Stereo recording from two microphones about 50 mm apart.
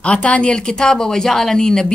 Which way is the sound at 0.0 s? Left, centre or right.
Left.